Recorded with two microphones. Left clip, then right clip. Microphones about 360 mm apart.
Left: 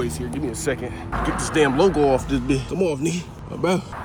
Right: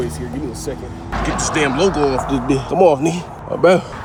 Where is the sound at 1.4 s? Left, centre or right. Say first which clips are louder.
Right 1 dB; centre.